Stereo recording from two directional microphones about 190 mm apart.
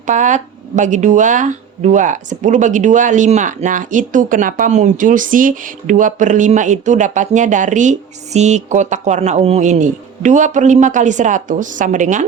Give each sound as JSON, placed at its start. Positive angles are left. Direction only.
{"t": 0.0, "sound": "speech", "side_deg": -40}